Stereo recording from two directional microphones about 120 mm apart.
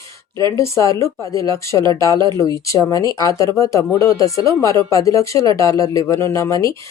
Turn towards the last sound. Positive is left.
turn(degrees=25)  # may be behind; listen again after turning